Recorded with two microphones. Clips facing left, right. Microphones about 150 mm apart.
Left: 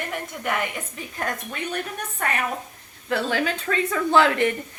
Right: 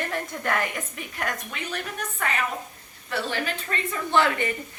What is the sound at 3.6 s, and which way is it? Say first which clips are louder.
Speech: left 7 dB; 90° left.